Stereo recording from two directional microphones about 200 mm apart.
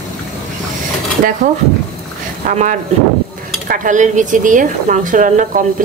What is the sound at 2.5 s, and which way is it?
Speech, 40° right (ahead or behind).